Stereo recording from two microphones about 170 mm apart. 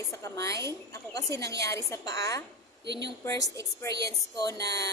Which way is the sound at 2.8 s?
90° right.